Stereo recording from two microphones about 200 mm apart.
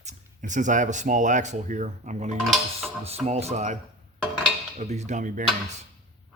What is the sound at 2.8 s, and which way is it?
Speech, 30° right (ahead or behind).